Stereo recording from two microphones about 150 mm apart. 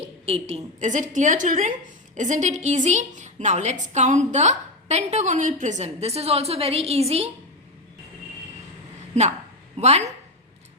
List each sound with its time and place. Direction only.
0.0 s a woman's voice: 40° right (ahead or behind)
9.7 s a woman's voice: 45° right (ahead or behind)